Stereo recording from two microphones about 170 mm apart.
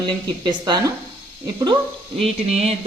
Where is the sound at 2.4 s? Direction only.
40° right (ahead or behind).